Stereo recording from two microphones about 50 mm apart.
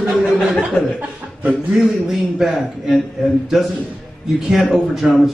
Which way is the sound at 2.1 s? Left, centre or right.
Centre.